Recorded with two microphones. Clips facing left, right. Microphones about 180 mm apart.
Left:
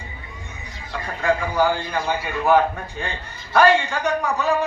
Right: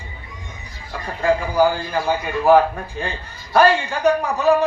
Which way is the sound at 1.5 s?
40° right (ahead or behind).